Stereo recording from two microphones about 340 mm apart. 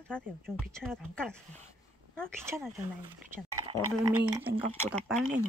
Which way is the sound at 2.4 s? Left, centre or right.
Centre.